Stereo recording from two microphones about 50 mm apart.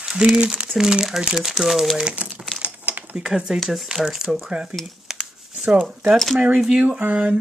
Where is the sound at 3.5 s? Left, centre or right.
Centre.